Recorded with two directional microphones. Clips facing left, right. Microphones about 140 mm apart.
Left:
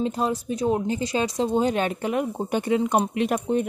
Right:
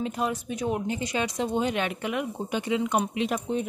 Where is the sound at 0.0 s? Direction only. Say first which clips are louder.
Left 4 dB; 30° left (ahead or behind).